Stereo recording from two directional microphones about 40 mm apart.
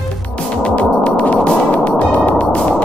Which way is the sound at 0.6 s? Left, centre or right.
Left.